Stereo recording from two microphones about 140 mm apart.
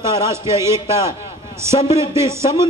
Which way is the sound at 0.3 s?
20° right (ahead or behind).